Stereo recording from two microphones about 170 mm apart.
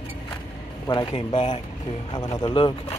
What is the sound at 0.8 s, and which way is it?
Speech, 30° left (ahead or behind).